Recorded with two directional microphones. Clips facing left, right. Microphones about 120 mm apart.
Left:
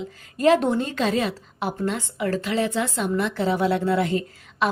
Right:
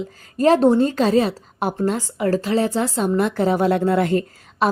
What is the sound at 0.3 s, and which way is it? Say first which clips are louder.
A woman's voice: right 4 dB; 35° right (ahead or behind).